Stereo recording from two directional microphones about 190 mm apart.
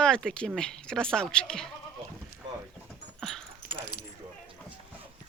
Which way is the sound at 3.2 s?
Centre (ahead or behind).